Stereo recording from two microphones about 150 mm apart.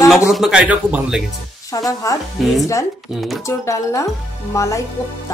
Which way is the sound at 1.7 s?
25° left (ahead or behind).